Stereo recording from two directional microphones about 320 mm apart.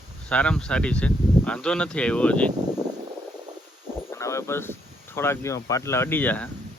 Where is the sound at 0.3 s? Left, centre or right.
Centre.